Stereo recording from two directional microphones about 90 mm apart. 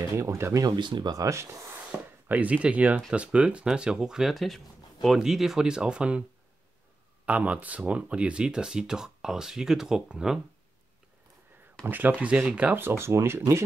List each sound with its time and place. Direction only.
0.1 s speech: 35° right (ahead or behind)
0.7 s speech: 60° right (ahead or behind)
1.1 s speech: 35° right (ahead or behind)
1.9 s speech: 15° right (ahead or behind)
7.2 s speech: 15° right (ahead or behind)
11.8 s speech: 20° right (ahead or behind)
12.7 s speech: 25° right (ahead or behind)